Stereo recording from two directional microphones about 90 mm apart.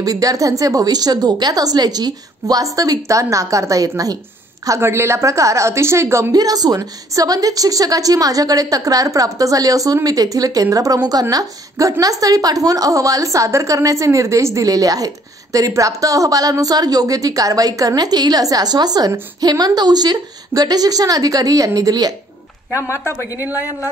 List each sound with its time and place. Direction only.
0.0 s speech: 40° right (ahead or behind)
4.6 s speech: 30° right (ahead or behind)
6.3 s a woman's voice: 45° right (ahead or behind)
23.0 s speech: 20° right (ahead or behind)